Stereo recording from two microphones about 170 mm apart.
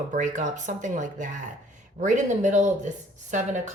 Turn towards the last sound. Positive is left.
turn(degrees=-45)  # may be behind; listen again after turning